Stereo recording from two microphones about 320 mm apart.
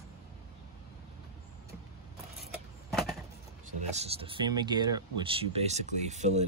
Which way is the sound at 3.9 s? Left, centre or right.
Centre.